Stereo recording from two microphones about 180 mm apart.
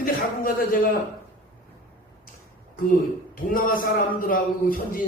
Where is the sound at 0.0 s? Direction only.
50° left (ahead or behind).